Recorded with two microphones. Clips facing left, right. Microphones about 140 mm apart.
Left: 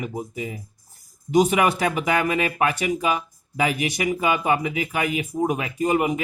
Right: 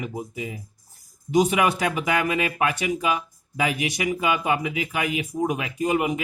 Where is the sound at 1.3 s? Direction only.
55° left (ahead or behind).